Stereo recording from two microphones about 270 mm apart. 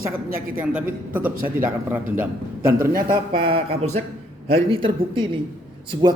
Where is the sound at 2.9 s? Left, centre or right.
Right.